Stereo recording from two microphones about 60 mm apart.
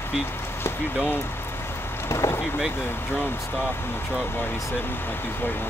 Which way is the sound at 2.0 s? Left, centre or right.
Left.